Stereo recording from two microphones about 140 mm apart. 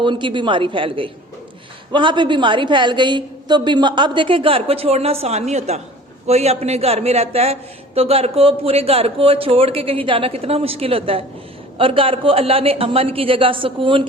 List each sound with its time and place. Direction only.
0.0 s a woman's voice: 35° right (ahead or behind)